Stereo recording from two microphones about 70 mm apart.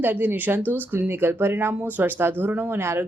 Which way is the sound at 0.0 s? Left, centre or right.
Right.